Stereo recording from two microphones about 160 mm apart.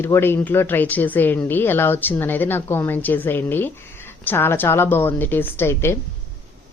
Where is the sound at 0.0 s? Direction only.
15° left (ahead or behind).